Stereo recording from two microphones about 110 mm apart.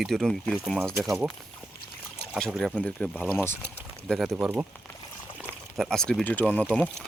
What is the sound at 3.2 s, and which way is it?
Speech, 20° left (ahead or behind).